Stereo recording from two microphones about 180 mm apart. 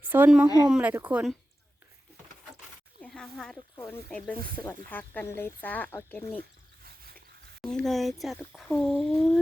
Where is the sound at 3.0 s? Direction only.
Centre (ahead or behind).